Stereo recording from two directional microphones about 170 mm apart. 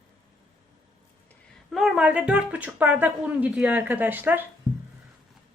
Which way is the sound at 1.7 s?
Centre (ahead or behind).